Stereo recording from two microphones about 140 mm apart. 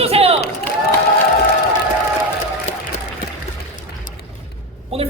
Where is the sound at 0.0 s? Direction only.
45° right (ahead or behind).